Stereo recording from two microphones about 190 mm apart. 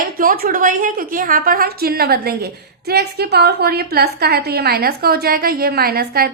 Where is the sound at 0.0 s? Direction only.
45° right (ahead or behind).